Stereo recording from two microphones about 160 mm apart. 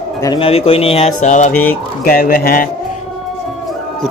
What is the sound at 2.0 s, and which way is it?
Speech, 65° left (ahead or behind).